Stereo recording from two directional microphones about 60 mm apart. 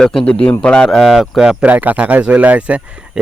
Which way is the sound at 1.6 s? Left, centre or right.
Right.